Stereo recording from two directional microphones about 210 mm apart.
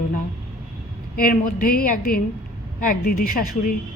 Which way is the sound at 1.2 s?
40° left (ahead or behind).